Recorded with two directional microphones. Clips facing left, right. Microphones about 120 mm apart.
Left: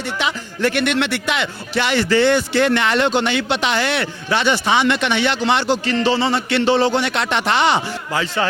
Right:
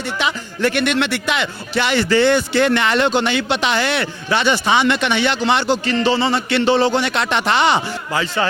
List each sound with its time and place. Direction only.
0.2 s speech: 20° right (ahead or behind)